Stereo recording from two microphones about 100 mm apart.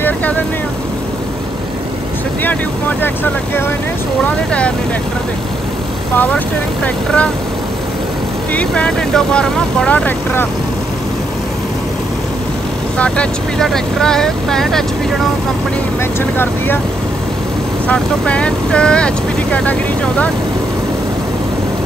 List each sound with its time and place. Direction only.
0.0 s vehicle: 20° left (ahead or behind)
4.5 s speech: 10° left (ahead or behind)
6.1 s speech: 15° left (ahead or behind)
8.5 s speech: 10° left (ahead or behind)
12.9 s speech: 10° left (ahead or behind)
16.3 s speech: 20° left (ahead or behind)
17.8 s speech: 10° left (ahead or behind)